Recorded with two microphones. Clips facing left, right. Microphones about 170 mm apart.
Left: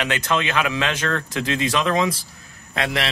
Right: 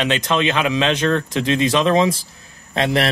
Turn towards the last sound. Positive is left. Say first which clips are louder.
# right 6 dB
turn(degrees=-30)  # may be behind; listen again after turning